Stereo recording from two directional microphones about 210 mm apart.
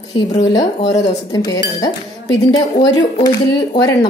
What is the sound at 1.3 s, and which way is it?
Speech, 15° left (ahead or behind).